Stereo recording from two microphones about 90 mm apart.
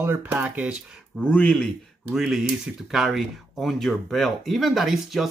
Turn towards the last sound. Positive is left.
turn(degrees=0)  # may be behind; listen again after turning